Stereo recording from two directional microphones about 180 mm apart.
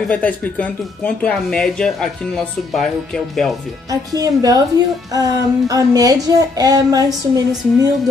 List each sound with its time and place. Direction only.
0.1 s speech: 10° left (ahead or behind)
3.9 s speech: 20° right (ahead or behind)